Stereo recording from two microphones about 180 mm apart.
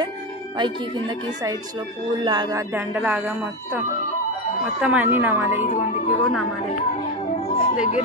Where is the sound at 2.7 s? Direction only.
10° right (ahead or behind).